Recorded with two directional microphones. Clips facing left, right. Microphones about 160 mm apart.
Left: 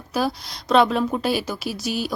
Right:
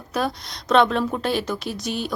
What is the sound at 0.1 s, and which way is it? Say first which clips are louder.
A woman's voice: left 1 dB; centre (ahead or behind).